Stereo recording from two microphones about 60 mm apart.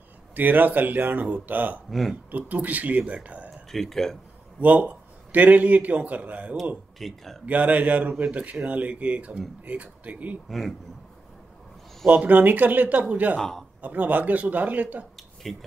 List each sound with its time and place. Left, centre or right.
0.4 s a man's voice: right
1.9 s speech: centre
2.3 s a man's voice: right
3.7 s speech: centre
4.6 s a man's voice: right
7.0 s speech: centre
7.4 s a man's voice: right
12.1 s a man's voice: right
13.4 s a man's voice: centre
13.7 s a man's voice: right
15.5 s speech: centre